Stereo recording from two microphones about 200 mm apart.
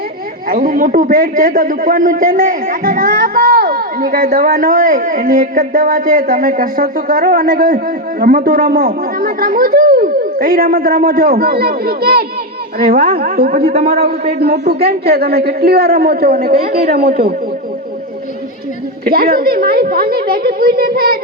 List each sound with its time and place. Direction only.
0.4 s a man's voice: 45° right (ahead or behind)
19.0 s a man's voice: 50° right (ahead or behind)